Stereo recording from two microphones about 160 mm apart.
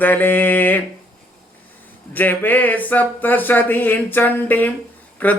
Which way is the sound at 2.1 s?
10° left (ahead or behind).